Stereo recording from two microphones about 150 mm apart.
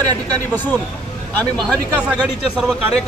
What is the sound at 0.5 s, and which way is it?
A man's voice, 15° left (ahead or behind).